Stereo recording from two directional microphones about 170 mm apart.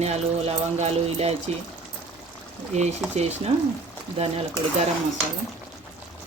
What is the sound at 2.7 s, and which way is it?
Speech, 40° right (ahead or behind).